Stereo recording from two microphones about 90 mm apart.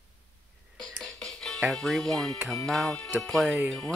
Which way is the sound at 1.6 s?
Centre (ahead or behind).